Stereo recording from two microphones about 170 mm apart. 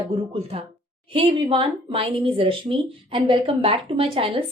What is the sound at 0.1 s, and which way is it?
Speech, 35° right (ahead or behind).